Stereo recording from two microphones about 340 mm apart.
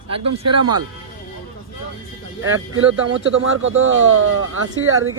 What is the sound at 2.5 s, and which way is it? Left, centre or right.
Speech, right.